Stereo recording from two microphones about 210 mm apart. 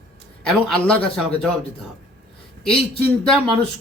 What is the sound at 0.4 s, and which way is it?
Speech, 5° left (ahead or behind).